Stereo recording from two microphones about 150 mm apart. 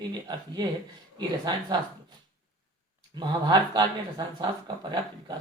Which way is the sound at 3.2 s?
30° right (ahead or behind).